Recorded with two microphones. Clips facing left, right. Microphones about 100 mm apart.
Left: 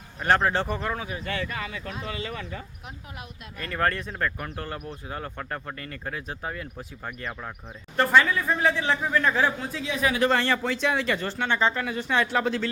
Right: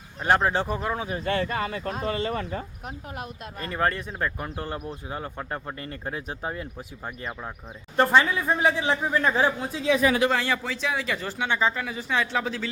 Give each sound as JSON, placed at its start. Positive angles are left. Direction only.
{"t": 0.2, "sound": "speech", "side_deg": -15}
{"t": 1.1, "sound": "speech", "side_deg": -35}
{"t": 3.8, "sound": "speech", "side_deg": -10}
{"t": 4.5, "sound": "speech", "side_deg": -25}
{"t": 6.7, "sound": "speech", "side_deg": -10}
{"t": 10.2, "sound": "speech", "side_deg": -5}